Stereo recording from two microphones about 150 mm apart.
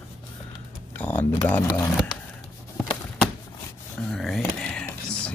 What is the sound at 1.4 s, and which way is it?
Speech, 15° left (ahead or behind).